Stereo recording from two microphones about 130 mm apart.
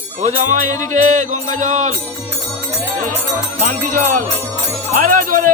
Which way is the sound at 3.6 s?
90° right.